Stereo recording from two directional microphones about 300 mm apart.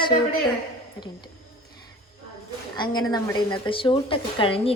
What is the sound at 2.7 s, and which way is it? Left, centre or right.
A woman's voice, centre.